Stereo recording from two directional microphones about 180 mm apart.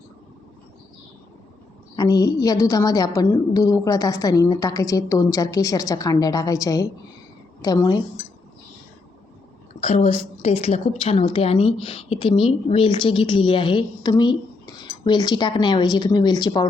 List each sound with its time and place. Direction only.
2.0 s a woman's voice: 20° left (ahead or behind)
9.8 s a woman's voice: 35° left (ahead or behind)